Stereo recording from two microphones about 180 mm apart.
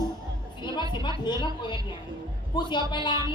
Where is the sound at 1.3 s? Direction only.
25° left (ahead or behind).